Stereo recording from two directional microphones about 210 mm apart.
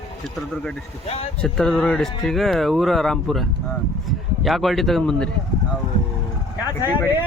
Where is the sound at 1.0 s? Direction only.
30° left (ahead or behind).